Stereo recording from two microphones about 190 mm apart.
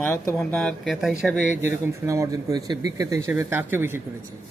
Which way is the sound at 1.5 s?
15° right (ahead or behind).